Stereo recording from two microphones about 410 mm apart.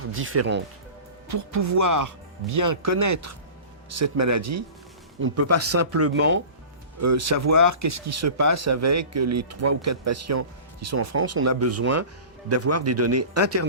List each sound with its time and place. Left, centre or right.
0.1 s speech: right
1.3 s speech: right
7.0 s speech: right